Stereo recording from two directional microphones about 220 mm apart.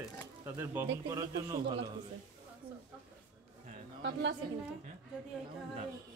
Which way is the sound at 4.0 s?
55° right (ahead or behind).